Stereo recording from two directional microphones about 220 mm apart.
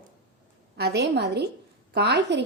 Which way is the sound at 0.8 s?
50° right (ahead or behind).